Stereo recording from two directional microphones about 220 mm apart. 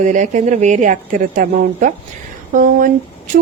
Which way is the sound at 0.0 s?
35° right (ahead or behind).